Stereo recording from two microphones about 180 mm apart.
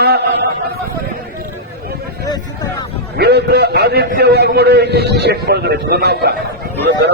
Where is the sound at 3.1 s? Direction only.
65° right (ahead or behind).